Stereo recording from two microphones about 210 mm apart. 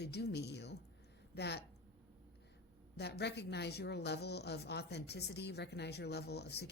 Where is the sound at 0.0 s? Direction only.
50° left (ahead or behind).